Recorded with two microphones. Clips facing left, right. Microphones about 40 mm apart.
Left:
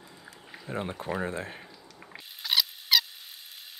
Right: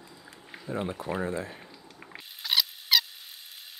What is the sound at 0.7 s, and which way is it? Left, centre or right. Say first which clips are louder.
Speech: right 1 dB; left.